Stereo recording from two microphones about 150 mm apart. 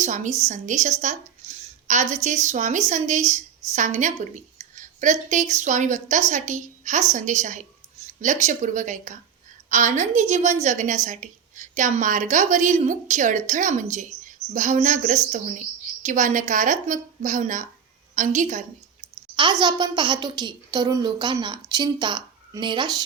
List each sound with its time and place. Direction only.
0.0 s a woman's voice: 55° right (ahead or behind)
19.1 s a woman's voice: 30° right (ahead or behind)